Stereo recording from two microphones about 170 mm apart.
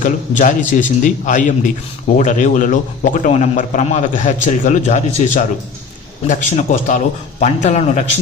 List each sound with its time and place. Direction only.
0.0 s a man's voice: 45° left (ahead or behind)